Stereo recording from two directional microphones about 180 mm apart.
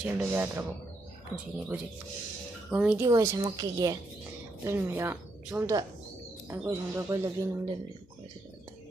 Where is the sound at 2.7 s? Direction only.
10° right (ahead or behind).